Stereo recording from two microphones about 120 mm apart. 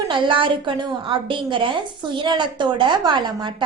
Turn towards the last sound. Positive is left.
turn(degrees=-40)  # may be behind; listen again after turning